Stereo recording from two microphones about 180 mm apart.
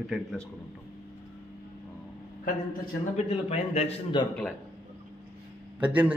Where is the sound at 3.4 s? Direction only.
35° left (ahead or behind).